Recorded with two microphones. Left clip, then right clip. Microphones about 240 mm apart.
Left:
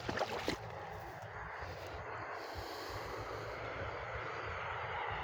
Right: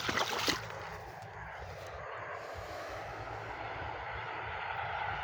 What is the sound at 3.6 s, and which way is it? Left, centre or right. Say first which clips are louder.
Vehicle: right 2 dB; right.